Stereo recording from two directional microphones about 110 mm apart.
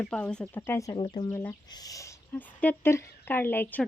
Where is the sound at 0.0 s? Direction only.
10° left (ahead or behind).